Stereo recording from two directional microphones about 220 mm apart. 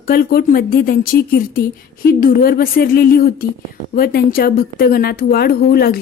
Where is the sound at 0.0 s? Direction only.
45° left (ahead or behind).